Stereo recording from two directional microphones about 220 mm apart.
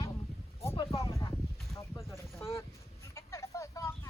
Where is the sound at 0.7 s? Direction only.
25° left (ahead or behind).